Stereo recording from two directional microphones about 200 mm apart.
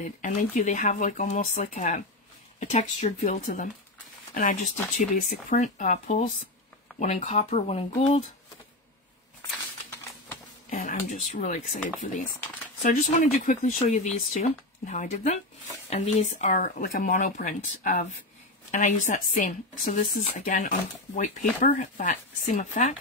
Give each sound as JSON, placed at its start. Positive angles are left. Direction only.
{"t": 0.0, "sound": "speech", "side_deg": 40}
{"t": 10.7, "sound": "speech", "side_deg": 40}
{"t": 12.8, "sound": "speech", "side_deg": 40}